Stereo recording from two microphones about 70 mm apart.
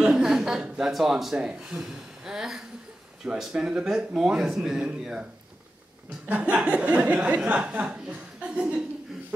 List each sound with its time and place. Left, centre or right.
0.0 s speech: centre
6.5 s speech: centre